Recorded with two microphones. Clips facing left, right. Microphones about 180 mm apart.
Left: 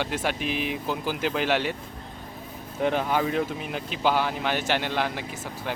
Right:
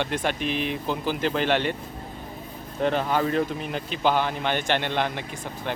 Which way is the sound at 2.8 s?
10° left (ahead or behind).